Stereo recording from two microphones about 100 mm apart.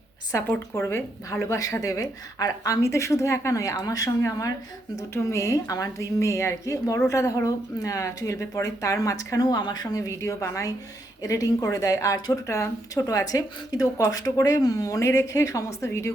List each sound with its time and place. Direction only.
0.4 s speech: 20° left (ahead or behind)